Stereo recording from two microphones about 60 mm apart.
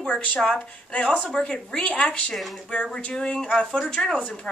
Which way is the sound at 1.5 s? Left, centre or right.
Centre.